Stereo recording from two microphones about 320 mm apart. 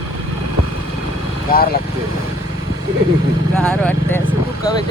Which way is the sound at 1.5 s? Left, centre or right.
Left.